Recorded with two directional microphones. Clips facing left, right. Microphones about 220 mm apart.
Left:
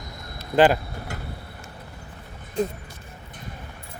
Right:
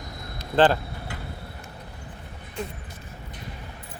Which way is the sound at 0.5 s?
10° left (ahead or behind).